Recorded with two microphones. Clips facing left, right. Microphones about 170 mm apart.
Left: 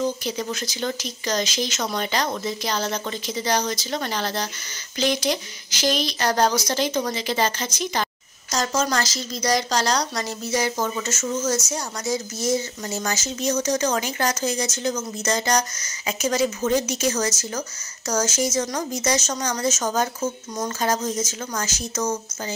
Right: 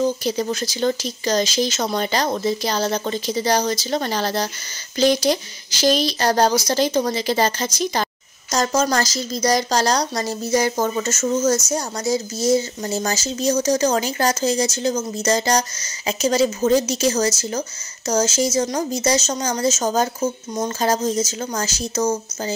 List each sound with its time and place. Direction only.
0.2 s speech: 35° right (ahead or behind)